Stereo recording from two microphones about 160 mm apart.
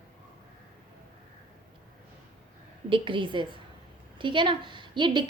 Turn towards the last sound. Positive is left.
turn(degrees=-30)  # may be behind; listen again after turning